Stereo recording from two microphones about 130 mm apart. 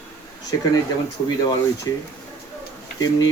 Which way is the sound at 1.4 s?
30° left (ahead or behind).